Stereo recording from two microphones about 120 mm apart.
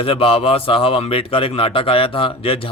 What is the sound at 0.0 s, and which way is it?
A man's voice, 50° left (ahead or behind).